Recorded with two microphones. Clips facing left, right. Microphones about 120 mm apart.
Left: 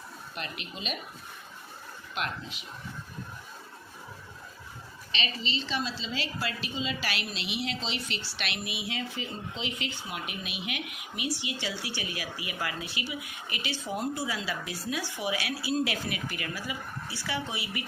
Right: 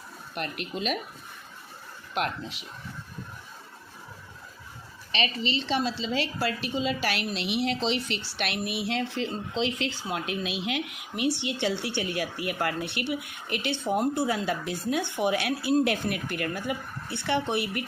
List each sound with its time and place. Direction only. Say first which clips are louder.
0.3 s speech: right 7 dB; 65° right (ahead or behind)
2.1 s speech: right 5 dB; 60° right (ahead or behind)
5.6 s speech: right 6 dB; 60° right (ahead or behind)
8.7 s a woman's voice: right 6 dB; 65° right (ahead or behind); by 10.8 s 90° right
11.2 s speech: right 7 dB; 70° right (ahead or behind)